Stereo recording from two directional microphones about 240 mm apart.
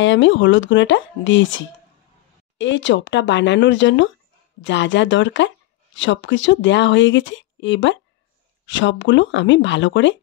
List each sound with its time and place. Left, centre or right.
0.0 s speech: left